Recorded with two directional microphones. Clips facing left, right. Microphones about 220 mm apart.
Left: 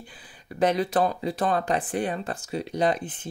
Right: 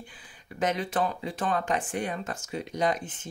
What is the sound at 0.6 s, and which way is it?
Speech, 35° left (ahead or behind).